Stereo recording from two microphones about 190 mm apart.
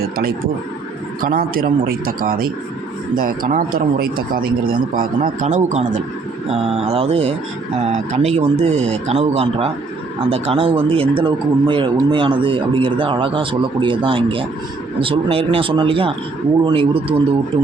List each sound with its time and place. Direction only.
0.0 s speech: 50° right (ahead or behind); by 17.2 s 30° right (ahead or behind)